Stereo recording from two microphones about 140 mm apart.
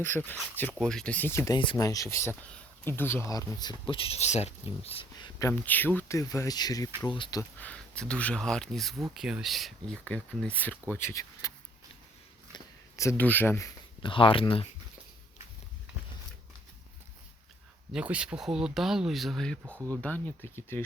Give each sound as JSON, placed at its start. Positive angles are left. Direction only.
{"t": 0.0, "sound": "speech", "side_deg": 15}
{"t": 0.7, "sound": "speech", "side_deg": 0}
{"t": 5.1, "sound": "a sound", "side_deg": 25}
{"t": 5.6, "sound": "speech", "side_deg": 15}
{"t": 7.6, "sound": "speech", "side_deg": 10}
{"t": 12.5, "sound": "a sound", "side_deg": 20}
{"t": 14.0, "sound": "speech", "side_deg": 40}
{"t": 17.9, "sound": "speech", "side_deg": -10}